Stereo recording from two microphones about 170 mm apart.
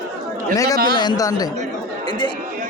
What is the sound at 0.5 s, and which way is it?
A man's voice, 20° left (ahead or behind).